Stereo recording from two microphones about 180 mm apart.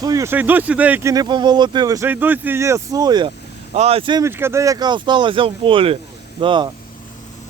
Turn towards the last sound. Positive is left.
turn(degrees=-25)  # may be behind; listen again after turning